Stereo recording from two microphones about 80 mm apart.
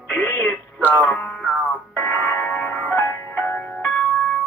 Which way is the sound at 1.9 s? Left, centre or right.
Left.